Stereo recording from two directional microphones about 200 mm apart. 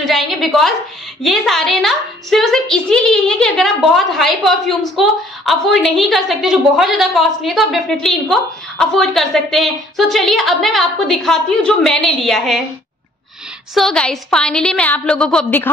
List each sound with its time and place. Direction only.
0.0 s a woman's voice: centre (ahead or behind)
13.7 s a woman's voice: 5° left (ahead or behind)